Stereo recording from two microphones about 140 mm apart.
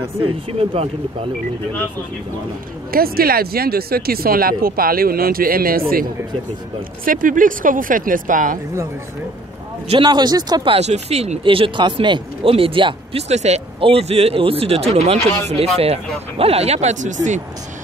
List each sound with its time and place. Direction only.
0.2 s speech: 45° right (ahead or behind)
2.9 s speech: 90° right
7.1 s speech: 75° right (ahead or behind)
9.8 s speech: 35° right (ahead or behind)
10.7 s speech: 50° right (ahead or behind)
13.3 s speech: 50° right (ahead or behind)